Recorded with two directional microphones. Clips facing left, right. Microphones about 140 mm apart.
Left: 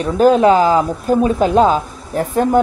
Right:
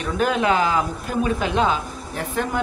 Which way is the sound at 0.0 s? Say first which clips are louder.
Left 10 dB; 35° left (ahead or behind).